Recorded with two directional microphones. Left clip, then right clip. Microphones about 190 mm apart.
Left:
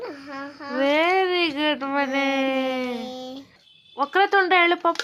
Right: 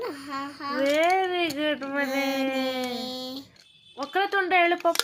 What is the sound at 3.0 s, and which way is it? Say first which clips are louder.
Speech: even; 15° left (ahead or behind).